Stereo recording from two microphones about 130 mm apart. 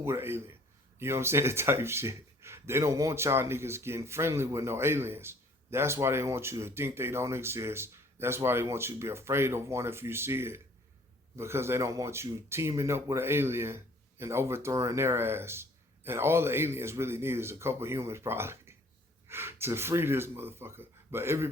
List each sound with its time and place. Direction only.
0.0 s speech: 20° right (ahead or behind)